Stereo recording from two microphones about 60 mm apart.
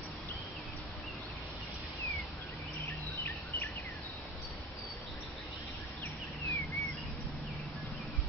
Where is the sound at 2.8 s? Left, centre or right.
Left.